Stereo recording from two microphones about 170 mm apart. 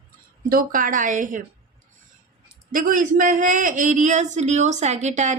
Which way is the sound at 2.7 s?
50° right (ahead or behind).